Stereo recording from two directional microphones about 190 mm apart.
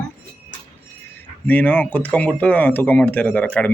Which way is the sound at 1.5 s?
10° left (ahead or behind).